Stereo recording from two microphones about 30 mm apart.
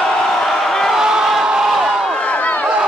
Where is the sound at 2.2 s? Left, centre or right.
Left.